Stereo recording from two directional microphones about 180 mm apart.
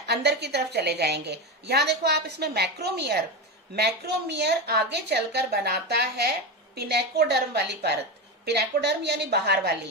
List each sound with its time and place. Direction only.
0.0 s a woman's voice: 65° right (ahead or behind)